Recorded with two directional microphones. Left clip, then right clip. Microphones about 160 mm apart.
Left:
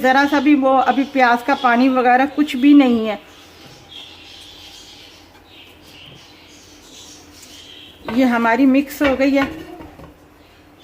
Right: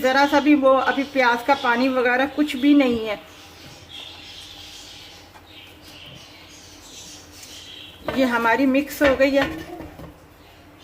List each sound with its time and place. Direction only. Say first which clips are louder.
0.0 s a woman's voice: left 3 dB; 40° left (ahead or behind)
8.2 s speech: left 4 dB; 40° left (ahead or behind)